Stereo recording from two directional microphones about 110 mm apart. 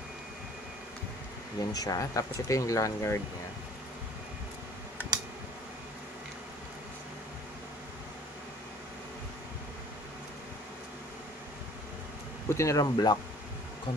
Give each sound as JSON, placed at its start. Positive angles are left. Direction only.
{"t": 1.6, "sound": "speech", "side_deg": 35}
{"t": 12.4, "sound": "speech", "side_deg": 25}